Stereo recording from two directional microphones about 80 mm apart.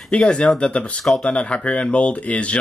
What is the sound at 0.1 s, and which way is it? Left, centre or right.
Speech, centre.